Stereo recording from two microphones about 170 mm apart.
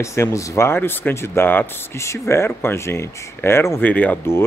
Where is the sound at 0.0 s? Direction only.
15° left (ahead or behind).